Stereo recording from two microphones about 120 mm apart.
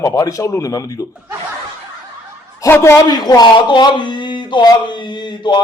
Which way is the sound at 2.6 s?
25° left (ahead or behind).